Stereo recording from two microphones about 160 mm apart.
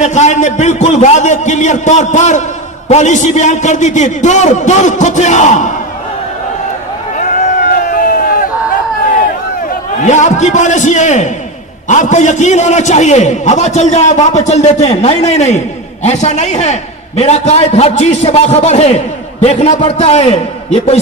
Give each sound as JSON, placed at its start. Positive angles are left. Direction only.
{"t": 0.0, "sound": "a man's voice", "side_deg": 45}
{"t": 7.2, "sound": "a sound", "side_deg": 50}
{"t": 10.0, "sound": "a man's voice", "side_deg": 50}